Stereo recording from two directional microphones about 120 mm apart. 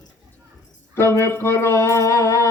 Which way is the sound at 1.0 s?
20° left (ahead or behind).